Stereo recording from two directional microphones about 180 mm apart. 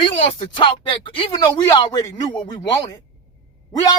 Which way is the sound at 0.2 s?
35° left (ahead or behind).